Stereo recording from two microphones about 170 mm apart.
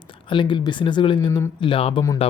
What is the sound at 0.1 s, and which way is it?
Speech, 30° left (ahead or behind).